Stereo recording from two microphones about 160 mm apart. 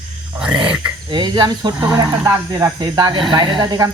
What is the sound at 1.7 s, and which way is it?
Speech, 15° right (ahead or behind).